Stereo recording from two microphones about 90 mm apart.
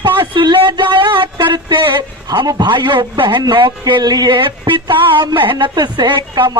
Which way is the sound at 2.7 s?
60° right (ahead or behind).